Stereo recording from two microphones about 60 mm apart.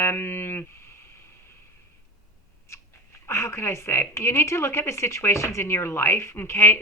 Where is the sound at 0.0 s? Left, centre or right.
Left.